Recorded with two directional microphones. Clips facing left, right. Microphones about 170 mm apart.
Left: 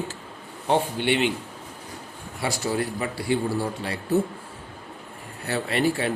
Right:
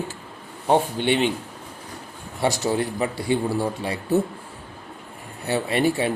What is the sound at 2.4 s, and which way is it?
A man's voice, 25° right (ahead or behind).